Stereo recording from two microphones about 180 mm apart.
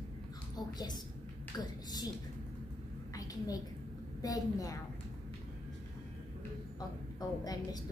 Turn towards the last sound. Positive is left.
turn(degrees=20)  # may be behind; listen again after turning